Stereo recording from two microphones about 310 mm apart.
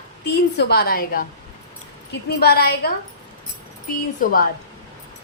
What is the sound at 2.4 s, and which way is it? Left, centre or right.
Speech, left.